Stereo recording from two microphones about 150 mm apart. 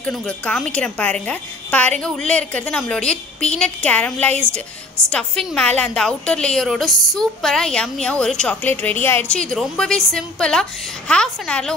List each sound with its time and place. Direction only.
0.0 s a woman's voice: 10° left (ahead or behind)